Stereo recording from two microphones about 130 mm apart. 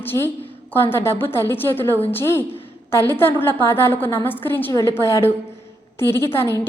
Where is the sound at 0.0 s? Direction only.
15° left (ahead or behind).